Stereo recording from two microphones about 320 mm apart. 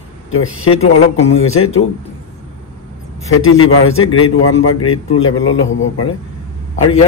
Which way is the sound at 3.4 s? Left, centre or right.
Left.